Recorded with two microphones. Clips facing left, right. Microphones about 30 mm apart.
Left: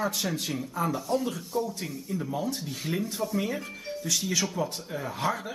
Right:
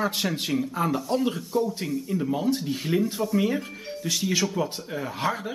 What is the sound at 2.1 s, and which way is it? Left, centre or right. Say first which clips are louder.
Speech: right 5 dB; centre.